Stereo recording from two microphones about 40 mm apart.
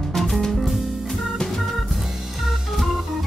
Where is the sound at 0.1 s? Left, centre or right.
Centre.